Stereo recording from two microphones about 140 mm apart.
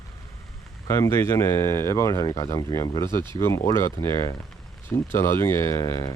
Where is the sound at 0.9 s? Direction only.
20° left (ahead or behind).